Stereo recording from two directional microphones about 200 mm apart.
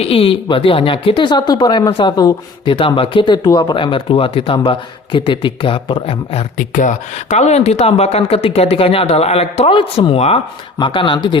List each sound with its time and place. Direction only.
0.0 s speech: 30° left (ahead or behind)
6.6 s speech: 40° left (ahead or behind); by 11.3 s 25° left (ahead or behind)